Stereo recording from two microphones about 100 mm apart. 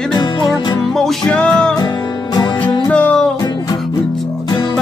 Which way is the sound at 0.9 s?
5° left (ahead or behind).